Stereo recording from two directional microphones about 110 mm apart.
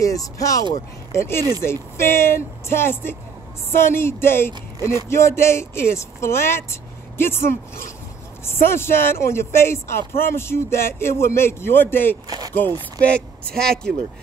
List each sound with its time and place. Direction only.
0.0 s speech: 30° left (ahead or behind)
12.3 s a sound: 35° right (ahead or behind)
12.6 s speech: 40° right (ahead or behind)
13.0 s speech: 10° left (ahead or behind)